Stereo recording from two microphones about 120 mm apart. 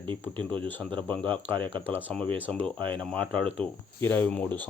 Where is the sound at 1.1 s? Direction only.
15° left (ahead or behind).